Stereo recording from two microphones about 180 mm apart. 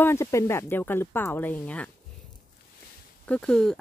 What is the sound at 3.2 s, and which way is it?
Speech, 5° left (ahead or behind).